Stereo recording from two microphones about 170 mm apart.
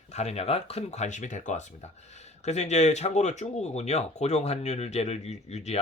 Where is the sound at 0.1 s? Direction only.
40° left (ahead or behind).